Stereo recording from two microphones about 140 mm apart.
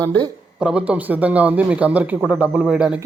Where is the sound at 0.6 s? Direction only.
10° right (ahead or behind).